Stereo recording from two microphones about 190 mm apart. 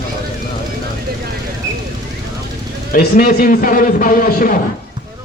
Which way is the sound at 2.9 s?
50° left (ahead or behind).